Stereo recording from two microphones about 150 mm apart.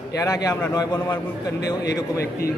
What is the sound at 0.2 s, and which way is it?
A man's voice, 25° left (ahead or behind).